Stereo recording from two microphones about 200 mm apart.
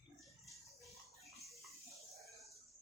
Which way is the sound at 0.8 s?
Centre (ahead or behind).